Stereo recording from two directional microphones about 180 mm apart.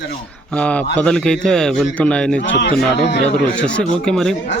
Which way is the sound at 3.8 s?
5° left (ahead or behind).